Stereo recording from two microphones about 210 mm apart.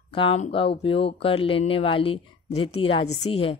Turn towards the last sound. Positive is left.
turn(degrees=25)  # may be behind; listen again after turning